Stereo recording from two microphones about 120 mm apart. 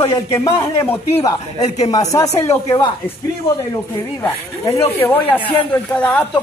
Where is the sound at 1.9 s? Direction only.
30° left (ahead or behind).